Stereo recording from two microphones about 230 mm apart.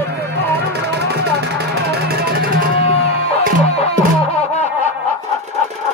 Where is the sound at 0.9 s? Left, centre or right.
Right.